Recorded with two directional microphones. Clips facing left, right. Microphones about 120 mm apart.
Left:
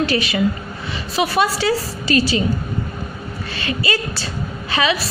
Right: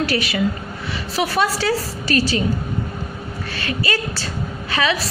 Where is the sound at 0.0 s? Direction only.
25° left (ahead or behind).